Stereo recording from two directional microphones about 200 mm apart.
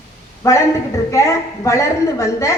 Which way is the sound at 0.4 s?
15° left (ahead or behind).